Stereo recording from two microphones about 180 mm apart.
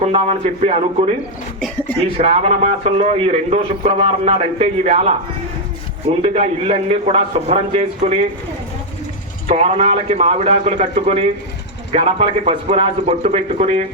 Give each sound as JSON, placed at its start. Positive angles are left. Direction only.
{"t": 0.0, "sound": "a man's voice", "side_deg": -35}
{"t": 6.2, "sound": "a man's voice", "side_deg": -35}
{"t": 9.5, "sound": "a man's voice", "side_deg": -35}